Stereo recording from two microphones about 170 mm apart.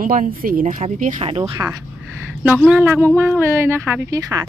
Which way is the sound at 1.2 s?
35° right (ahead or behind).